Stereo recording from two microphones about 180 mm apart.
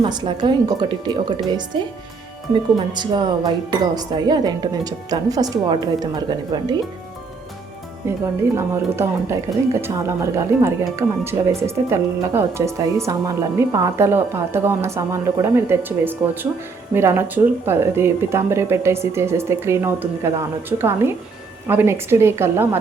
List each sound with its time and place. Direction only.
0.0 s music: 25° right (ahead or behind)
8.0 s speech: 15° right (ahead or behind)